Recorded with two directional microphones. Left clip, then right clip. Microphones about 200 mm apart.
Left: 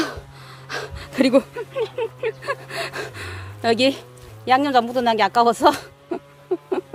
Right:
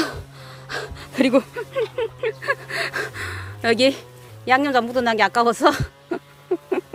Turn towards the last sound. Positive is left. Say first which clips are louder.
# right 1 dB
turn(degrees=-5)  # may be behind; listen again after turning